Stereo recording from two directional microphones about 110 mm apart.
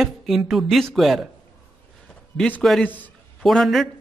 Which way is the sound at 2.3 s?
10° left (ahead or behind).